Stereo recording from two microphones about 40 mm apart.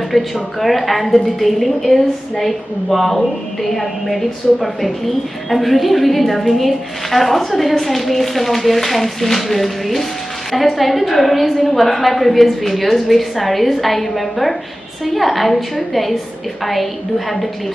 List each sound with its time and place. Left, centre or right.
0.1 s a woman's voice: centre